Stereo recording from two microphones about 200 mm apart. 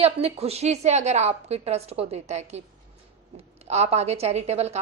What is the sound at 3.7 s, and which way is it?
Speech, 30° right (ahead or behind).